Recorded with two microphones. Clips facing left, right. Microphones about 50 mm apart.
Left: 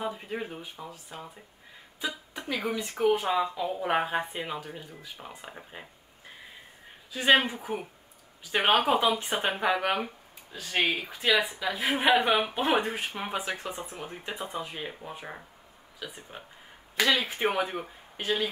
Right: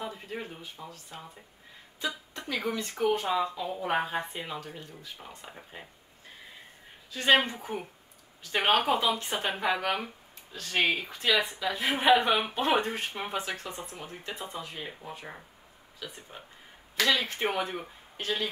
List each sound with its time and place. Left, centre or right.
0.0 s a sound: centre
2.0 s speech: centre
7.1 s a woman's voice: centre
13.9 s speech: left